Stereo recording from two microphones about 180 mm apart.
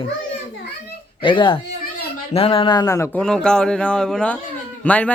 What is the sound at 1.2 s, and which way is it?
Speech, 25° left (ahead or behind).